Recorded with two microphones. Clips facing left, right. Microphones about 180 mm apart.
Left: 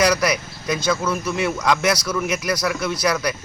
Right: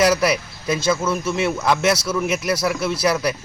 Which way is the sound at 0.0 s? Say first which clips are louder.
Right 2 dB; 5° right (ahead or behind).